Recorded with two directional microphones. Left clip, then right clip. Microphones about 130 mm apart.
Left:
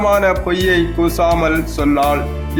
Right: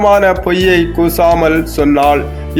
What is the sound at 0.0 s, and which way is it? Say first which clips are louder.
Speech: right 5 dB; 20° right (ahead or behind).